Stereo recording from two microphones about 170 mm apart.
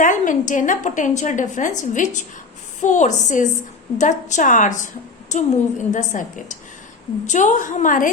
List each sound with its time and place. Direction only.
0.0 s a woman's voice: 50° left (ahead or behind)